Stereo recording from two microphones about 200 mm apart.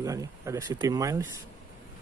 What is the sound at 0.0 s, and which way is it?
Speech, 15° right (ahead or behind).